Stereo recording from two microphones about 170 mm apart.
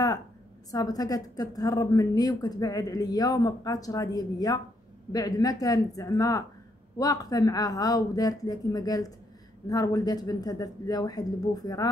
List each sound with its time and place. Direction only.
0.7 s a woman's voice: 20° left (ahead or behind)